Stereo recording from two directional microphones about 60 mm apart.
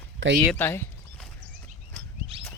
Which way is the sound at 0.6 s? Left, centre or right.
Left.